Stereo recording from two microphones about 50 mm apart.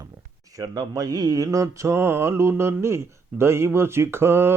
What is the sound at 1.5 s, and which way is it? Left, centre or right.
Mantra, right.